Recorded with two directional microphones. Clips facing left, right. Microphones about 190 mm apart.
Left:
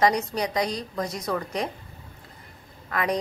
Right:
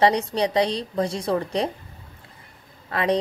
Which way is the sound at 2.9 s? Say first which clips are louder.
Right 4 dB; 30° right (ahead or behind).